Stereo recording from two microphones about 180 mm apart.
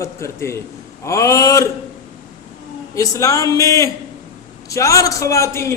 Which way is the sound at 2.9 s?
15° left (ahead or behind).